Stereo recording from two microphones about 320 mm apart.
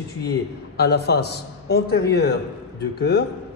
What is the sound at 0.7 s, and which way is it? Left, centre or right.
Speech, left.